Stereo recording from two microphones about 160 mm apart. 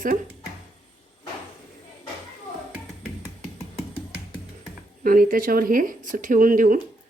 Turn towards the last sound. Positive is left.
turn(degrees=-55)  # may be behind; listen again after turning